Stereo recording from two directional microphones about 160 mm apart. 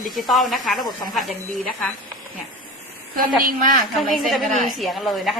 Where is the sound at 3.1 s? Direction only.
65° right (ahead or behind).